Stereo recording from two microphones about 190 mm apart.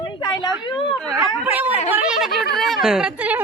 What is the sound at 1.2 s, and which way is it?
Speech, 10° right (ahead or behind).